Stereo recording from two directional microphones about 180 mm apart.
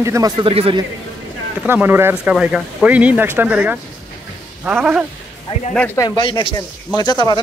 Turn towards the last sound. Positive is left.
turn(degrees=25)  # may be behind; listen again after turning